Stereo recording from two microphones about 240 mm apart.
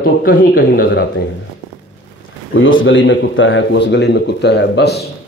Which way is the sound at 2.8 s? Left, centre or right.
Left.